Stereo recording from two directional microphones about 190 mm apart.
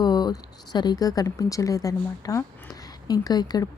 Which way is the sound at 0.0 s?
20° left (ahead or behind).